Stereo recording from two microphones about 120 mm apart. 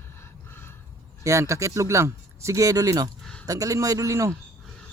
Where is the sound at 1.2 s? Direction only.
25° right (ahead or behind).